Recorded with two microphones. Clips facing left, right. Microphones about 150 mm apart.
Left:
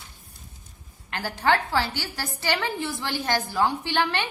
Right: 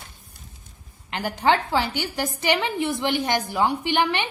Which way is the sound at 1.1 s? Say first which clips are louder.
Right 2 dB; 20° right (ahead or behind).